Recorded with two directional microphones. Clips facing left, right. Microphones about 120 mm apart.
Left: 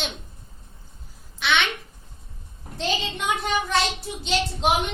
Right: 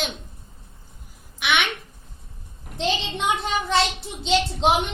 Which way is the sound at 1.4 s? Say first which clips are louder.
Even; 15° right (ahead or behind).